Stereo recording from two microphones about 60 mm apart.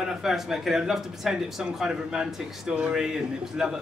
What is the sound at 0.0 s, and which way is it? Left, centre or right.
Speech, centre.